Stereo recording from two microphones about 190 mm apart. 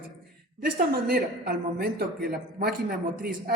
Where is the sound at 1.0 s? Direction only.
55° right (ahead or behind).